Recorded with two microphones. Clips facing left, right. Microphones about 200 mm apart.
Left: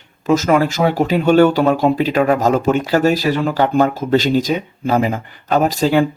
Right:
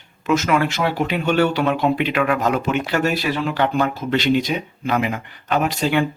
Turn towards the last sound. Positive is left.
turn(degrees=35)  # may be behind; listen again after turning